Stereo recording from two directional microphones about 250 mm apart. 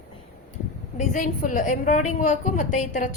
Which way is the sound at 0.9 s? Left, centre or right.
Left.